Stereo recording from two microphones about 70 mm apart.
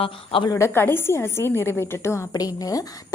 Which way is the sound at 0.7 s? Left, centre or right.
Left.